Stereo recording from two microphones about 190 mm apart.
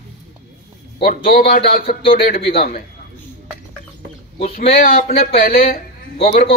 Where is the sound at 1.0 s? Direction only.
50° left (ahead or behind).